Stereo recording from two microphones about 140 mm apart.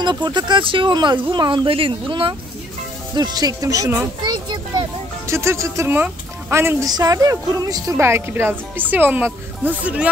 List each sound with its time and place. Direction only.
0.0 s speech: 30° right (ahead or behind)
5.2 s a woman's voice: 20° right (ahead or behind)